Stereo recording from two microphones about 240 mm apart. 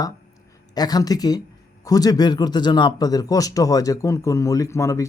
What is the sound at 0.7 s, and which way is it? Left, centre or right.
Speech, centre.